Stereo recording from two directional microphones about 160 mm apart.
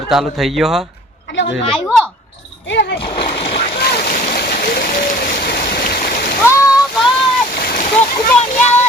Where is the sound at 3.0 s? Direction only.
75° left (ahead or behind).